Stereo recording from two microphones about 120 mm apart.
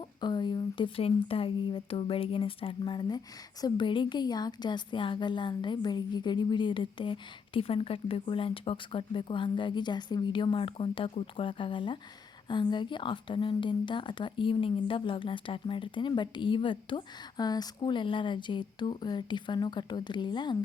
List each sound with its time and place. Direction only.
0.2 s a woman's voice: 40° left (ahead or behind)